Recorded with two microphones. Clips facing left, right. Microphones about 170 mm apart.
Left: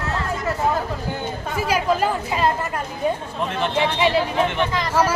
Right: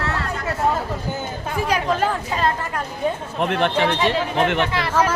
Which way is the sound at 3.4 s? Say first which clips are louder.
Right 8 dB; 65° right (ahead or behind).